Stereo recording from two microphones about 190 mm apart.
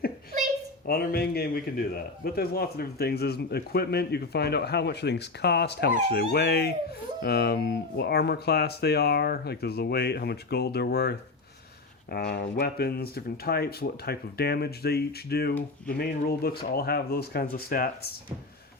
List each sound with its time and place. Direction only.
0.9 s a man's voice: 55° left (ahead or behind)
12.1 s a man's voice: 60° left (ahead or behind)